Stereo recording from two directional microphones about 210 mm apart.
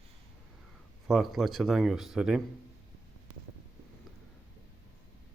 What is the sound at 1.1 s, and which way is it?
Speech, centre (ahead or behind).